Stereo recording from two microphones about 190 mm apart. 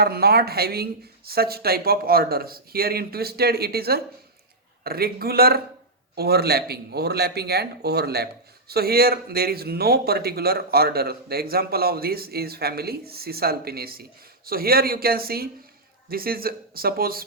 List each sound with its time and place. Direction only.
0.0 s speech: 55° right (ahead or behind)